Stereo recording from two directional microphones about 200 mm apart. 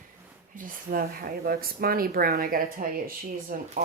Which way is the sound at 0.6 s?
45° right (ahead or behind).